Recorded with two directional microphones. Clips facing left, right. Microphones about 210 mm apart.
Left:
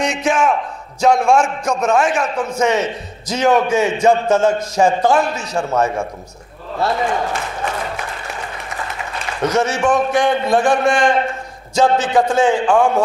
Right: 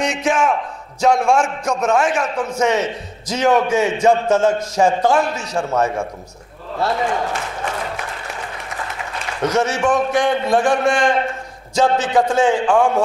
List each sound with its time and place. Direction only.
0.0 s a man's voice: 15° left (ahead or behind)
5.6 s a man's voice: 25° left (ahead or behind)
6.8 s applause: 20° left (ahead or behind)
9.7 s a man's voice: 20° left (ahead or behind)